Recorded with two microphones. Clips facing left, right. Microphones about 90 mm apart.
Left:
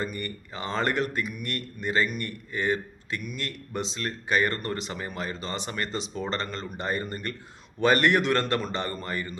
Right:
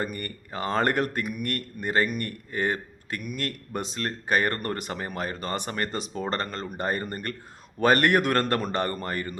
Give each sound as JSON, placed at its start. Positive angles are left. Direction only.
{"t": 0.0, "sound": "speech", "side_deg": -50}